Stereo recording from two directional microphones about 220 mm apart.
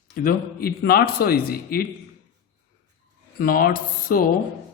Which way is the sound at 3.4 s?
40° left (ahead or behind).